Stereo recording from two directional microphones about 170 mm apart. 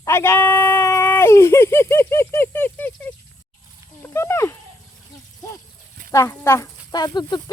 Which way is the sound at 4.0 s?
15° left (ahead or behind).